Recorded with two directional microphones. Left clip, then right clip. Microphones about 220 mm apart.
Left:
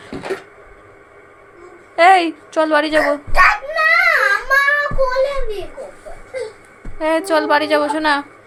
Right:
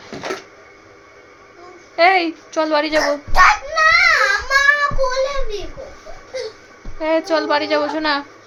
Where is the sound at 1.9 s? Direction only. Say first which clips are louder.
Left 3 dB; 10° left (ahead or behind).